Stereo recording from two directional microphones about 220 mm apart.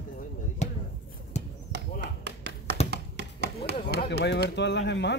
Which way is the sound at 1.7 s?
50° right (ahead or behind).